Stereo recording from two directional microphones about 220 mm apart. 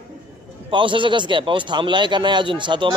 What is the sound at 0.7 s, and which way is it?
A man's voice, 20° right (ahead or behind).